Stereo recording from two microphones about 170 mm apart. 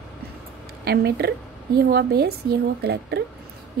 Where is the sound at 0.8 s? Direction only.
70° right (ahead or behind).